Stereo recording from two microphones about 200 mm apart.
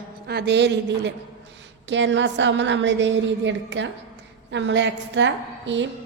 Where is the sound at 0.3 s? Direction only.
55° right (ahead or behind).